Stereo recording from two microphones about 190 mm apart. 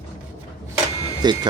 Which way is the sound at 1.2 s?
20° right (ahead or behind).